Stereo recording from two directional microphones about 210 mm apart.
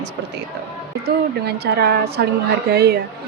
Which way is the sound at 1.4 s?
50° right (ahead or behind).